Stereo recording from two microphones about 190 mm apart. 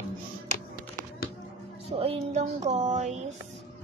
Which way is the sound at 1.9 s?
30° right (ahead or behind).